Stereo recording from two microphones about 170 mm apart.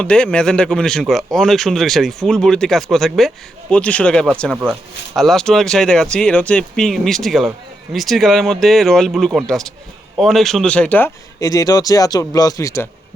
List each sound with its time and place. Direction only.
0.0 s speech: 5° left (ahead or behind)